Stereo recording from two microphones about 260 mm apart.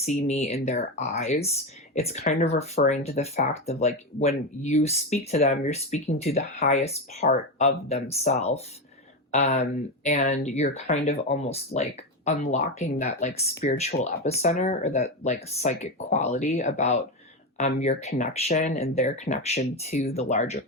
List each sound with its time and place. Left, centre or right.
0.3 s speech: left